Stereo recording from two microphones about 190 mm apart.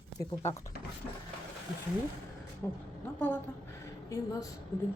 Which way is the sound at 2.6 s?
10° left (ahead or behind).